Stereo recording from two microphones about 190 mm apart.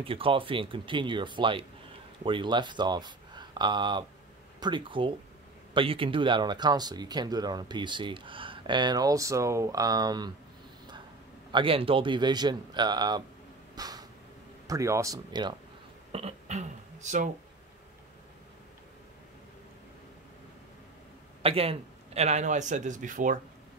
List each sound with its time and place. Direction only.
0.0 s speech: 30° right (ahead or behind)
11.5 s speech: 30° right (ahead or behind)
13.7 s a sound: 20° right (ahead or behind)
14.7 s speech: 15° right (ahead or behind)
16.1 s speech: 35° right (ahead or behind)
21.4 s a man's voice: 30° right (ahead or behind)